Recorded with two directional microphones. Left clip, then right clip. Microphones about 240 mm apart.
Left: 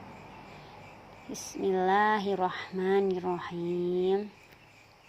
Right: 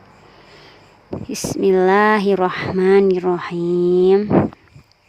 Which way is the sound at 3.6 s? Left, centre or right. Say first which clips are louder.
Right 16 dB; right.